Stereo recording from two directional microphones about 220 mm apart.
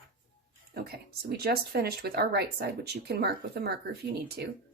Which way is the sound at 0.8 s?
45° right (ahead or behind).